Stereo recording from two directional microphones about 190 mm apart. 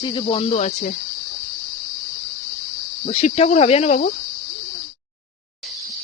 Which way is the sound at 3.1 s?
35° left (ahead or behind).